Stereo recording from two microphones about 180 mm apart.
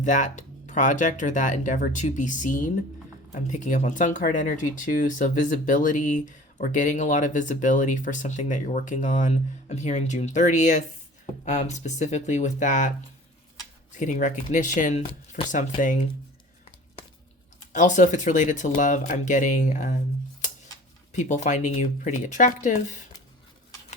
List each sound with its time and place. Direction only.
0.0 s speech: 45° left (ahead or behind)
13.9 s speech: 45° left (ahead or behind)
17.7 s speech: 45° left (ahead or behind)
21.1 s speech: 45° left (ahead or behind)